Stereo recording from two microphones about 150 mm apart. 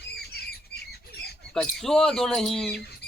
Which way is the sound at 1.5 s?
Centre (ahead or behind).